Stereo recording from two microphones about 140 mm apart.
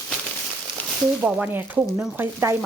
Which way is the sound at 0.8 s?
10° left (ahead or behind).